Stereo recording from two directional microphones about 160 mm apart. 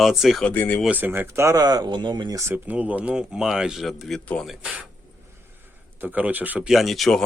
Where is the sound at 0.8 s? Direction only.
10° right (ahead or behind).